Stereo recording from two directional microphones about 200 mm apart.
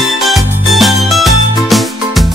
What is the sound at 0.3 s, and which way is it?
Music, centre (ahead or behind).